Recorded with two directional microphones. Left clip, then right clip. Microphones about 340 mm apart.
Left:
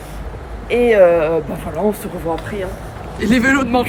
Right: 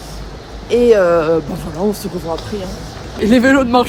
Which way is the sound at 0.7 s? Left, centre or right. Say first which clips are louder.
Even; centre.